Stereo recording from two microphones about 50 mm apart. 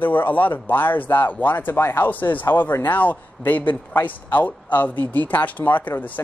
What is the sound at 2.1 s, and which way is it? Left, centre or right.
Speech, left.